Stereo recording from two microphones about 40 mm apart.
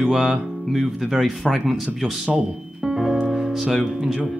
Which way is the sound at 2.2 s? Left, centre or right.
Right.